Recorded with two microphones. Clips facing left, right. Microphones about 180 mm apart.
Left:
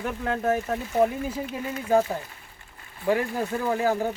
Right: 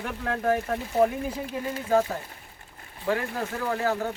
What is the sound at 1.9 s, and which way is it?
Speech, 15° left (ahead or behind).